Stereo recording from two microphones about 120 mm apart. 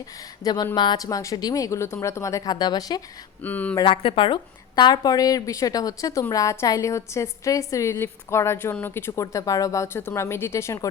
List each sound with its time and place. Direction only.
0.4 s a woman's voice: 35° left (ahead or behind)
3.4 s speech: 15° left (ahead or behind)
3.8 s a woman's voice: 45° left (ahead or behind); by 10.8 s 25° left (ahead or behind)